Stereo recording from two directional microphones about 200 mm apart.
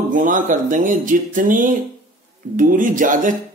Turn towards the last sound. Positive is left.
turn(degrees=-40)  # may be behind; listen again after turning